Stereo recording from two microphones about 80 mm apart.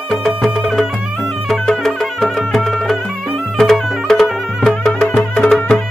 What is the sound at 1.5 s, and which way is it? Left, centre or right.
Music, centre.